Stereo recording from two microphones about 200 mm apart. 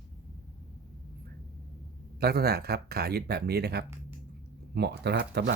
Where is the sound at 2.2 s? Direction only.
50° right (ahead or behind).